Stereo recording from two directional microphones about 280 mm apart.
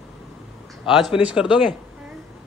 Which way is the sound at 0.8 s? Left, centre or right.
Centre.